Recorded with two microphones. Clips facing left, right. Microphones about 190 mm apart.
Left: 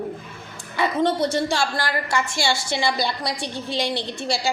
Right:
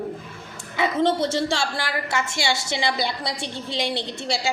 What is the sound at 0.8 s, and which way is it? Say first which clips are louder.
A woman's voice: even; 25° right (ahead or behind).